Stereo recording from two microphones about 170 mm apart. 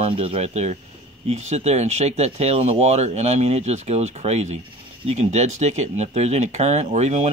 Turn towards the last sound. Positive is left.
turn(degrees=-40)  # may be behind; listen again after turning